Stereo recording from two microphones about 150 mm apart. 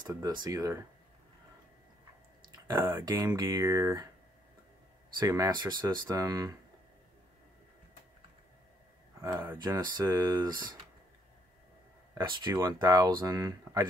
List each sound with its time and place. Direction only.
0.3 s speech: 20° right (ahead or behind)
2.7 s speech: 15° right (ahead or behind)
5.2 s speech: 25° right (ahead or behind)
9.2 s speech: 20° right (ahead or behind)
9.8 s speech: 25° right (ahead or behind)
12.1 s speech: 30° right (ahead or behind)